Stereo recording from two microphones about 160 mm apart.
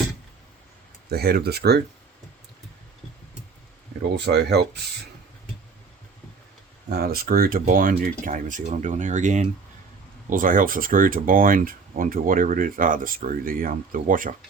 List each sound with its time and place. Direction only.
1.1 s speech: 80° right
4.2 s speech: 90° right
6.8 s speech: 85° right; by 14.3 s 60° right (ahead or behind)